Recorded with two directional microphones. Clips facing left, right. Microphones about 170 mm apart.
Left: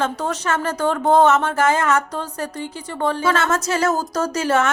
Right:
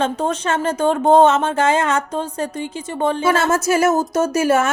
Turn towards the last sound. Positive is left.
turn(degrees=-25)  # may be behind; listen again after turning